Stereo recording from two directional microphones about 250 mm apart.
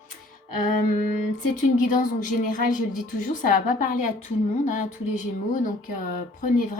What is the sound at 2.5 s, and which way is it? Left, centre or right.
Speech, left.